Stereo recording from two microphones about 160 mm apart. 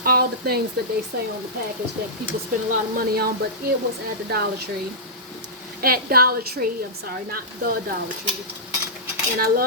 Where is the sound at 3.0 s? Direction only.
75° right (ahead or behind).